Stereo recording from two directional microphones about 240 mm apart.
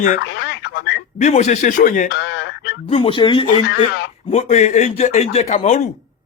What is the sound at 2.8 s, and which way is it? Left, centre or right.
Speech, left.